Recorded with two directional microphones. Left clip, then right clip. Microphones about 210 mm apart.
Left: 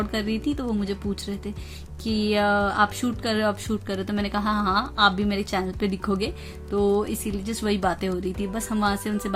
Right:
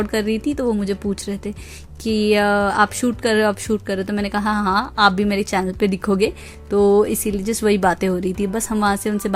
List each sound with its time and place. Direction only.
0.0 s speech: 30° right (ahead or behind)